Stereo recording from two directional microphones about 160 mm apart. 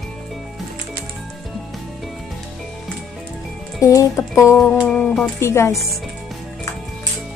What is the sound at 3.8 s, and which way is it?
Speech, 20° left (ahead or behind).